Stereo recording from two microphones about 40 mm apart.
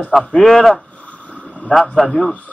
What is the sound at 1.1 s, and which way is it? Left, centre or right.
Boat, left.